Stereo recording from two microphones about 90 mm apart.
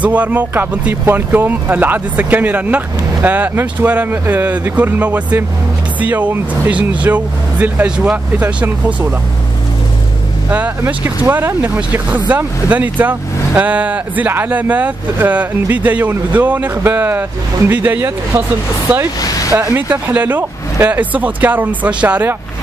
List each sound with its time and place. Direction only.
0.0 s speech: 15° right (ahead or behind)
10.5 s speech: 15° right (ahead or behind)